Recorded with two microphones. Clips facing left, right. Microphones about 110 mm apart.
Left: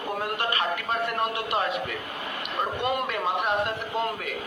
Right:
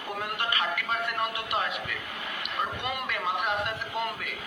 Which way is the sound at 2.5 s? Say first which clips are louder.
Left 6 dB; 40° left (ahead or behind).